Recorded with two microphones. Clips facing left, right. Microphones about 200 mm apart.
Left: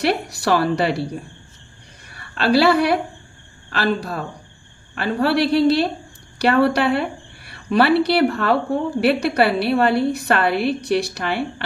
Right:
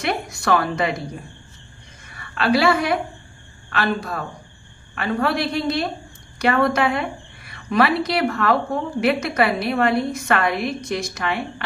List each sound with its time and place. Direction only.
0.0 s a woman's voice: 35° left (ahead or behind)
2.3 s a woman's voice: 35° left (ahead or behind)